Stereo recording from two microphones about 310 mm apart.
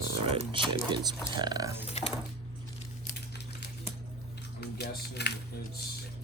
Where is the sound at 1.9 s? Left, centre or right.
Left.